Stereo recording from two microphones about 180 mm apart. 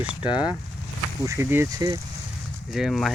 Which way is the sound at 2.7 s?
Centre (ahead or behind).